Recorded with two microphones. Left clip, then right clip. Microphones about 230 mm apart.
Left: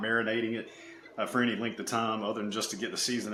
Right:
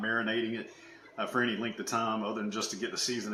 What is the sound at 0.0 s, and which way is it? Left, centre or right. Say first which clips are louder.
Speech: left 2 dB; left.